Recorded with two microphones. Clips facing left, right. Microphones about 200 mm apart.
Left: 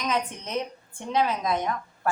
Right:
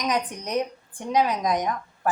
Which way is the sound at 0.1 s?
15° right (ahead or behind).